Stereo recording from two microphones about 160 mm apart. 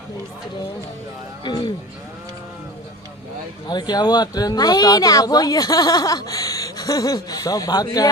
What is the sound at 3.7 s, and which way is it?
Speech, 25° left (ahead or behind).